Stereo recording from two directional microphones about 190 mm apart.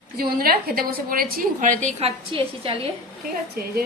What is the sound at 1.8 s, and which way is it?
Speech, 30° right (ahead or behind).